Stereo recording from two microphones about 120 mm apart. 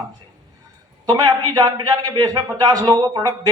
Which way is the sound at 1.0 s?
30° right (ahead or behind).